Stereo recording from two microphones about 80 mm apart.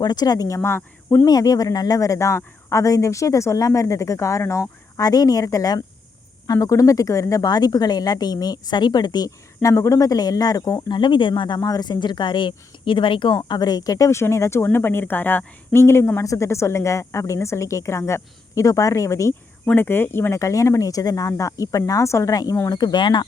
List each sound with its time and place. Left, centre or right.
0.0 s speech: left
0.4 s speech: left
1.2 s speech: left
4.9 s speech: left
9.6 s speech: left
10.8 s speech: left
11.6 s speech: left
13.3 s speech: left
19.6 s speech: left